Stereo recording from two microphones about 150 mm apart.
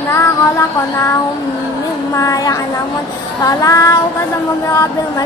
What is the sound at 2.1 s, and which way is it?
Female singing, 20° left (ahead or behind).